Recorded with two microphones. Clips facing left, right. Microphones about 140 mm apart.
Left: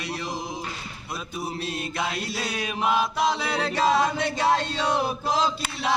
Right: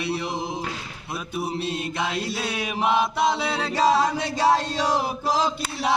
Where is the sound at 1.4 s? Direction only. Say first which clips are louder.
Right 3 dB; 25° right (ahead or behind).